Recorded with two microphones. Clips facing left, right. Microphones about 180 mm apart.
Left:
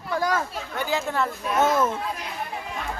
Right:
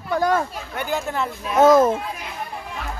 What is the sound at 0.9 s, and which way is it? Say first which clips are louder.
Speech: right 1 dB; centre (ahead or behind).